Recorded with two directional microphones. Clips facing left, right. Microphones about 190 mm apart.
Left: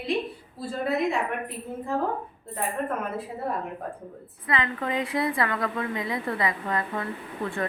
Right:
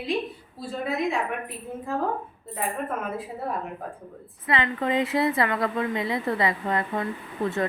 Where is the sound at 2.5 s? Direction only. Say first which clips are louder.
Left 1 dB; 5° right (ahead or behind).